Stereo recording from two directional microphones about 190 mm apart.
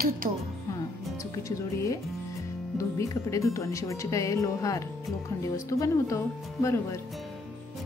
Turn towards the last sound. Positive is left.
turn(degrees=15)  # may be behind; listen again after turning